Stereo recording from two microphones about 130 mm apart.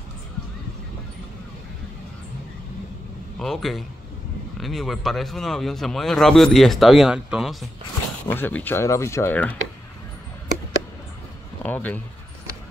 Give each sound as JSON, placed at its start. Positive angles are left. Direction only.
{"t": 3.3, "sound": "speech", "side_deg": 0}
{"t": 8.3, "sound": "speech", "side_deg": 15}
{"t": 11.6, "sound": "speech", "side_deg": 10}